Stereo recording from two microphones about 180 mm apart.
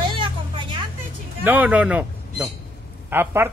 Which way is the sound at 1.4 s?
10° right (ahead or behind).